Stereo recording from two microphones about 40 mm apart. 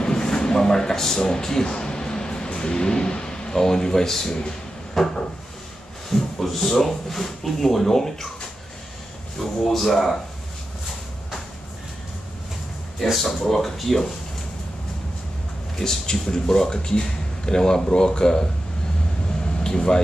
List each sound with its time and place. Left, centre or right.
0.0 s speech: centre
4.9 s a sound: centre
6.0 s speech: centre
9.4 s speech: centre
13.5 s speech: centre
15.8 s speech: centre
19.6 s air conditioning: centre